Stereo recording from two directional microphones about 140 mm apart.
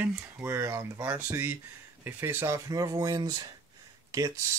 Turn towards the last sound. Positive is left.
turn(degrees=-25)  # may be behind; listen again after turning